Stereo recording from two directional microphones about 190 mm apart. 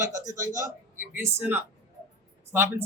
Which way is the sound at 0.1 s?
15° right (ahead or behind).